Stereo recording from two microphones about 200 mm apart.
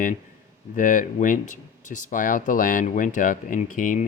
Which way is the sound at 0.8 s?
40° left (ahead or behind).